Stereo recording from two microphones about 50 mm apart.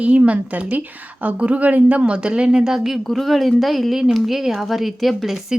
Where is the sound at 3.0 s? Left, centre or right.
Centre.